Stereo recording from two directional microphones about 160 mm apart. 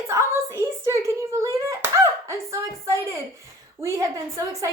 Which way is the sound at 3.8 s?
20° right (ahead or behind).